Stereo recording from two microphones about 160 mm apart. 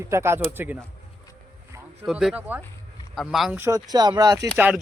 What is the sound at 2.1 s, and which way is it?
Speech, 5° right (ahead or behind).